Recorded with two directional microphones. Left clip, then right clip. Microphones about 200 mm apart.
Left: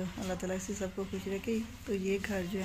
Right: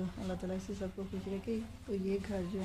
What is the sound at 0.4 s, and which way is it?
Speech, 25° left (ahead or behind).